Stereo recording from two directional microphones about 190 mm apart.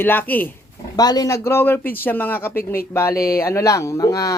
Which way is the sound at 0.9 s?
20° left (ahead or behind).